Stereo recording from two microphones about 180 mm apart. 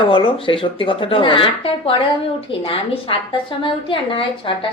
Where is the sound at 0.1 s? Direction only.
30° left (ahead or behind).